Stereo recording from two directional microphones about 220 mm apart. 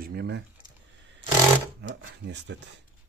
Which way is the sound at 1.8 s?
50° right (ahead or behind).